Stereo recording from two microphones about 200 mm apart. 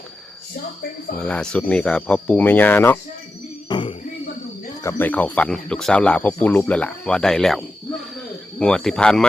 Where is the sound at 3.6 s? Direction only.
25° left (ahead or behind).